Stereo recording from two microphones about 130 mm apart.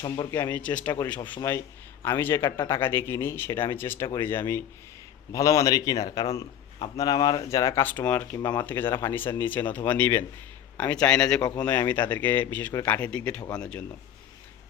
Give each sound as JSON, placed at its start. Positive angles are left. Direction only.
{"t": 0.3, "sound": "speech", "side_deg": 20}
{"t": 1.4, "sound": "a man's voice", "side_deg": 20}
{"t": 7.4, "sound": "speech", "side_deg": 25}
{"t": 8.4, "sound": "speech", "side_deg": 30}
{"t": 8.6, "sound": "speech", "side_deg": 15}